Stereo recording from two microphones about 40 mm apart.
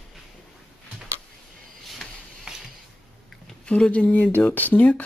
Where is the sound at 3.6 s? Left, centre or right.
Left.